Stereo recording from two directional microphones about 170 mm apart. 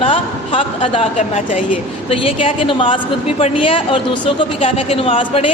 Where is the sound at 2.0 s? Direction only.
30° left (ahead or behind).